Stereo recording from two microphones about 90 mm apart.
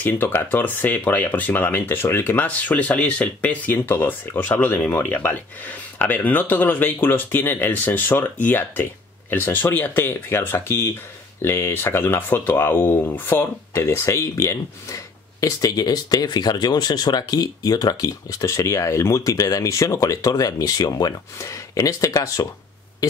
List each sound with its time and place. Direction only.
0.0 s speech: 20° left (ahead or behind); by 21.1 s 45° left (ahead or behind)
21.4 s speech: 35° left (ahead or behind)